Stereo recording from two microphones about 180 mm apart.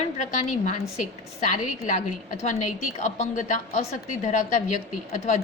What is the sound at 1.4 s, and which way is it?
A woman's voice, 45° left (ahead or behind).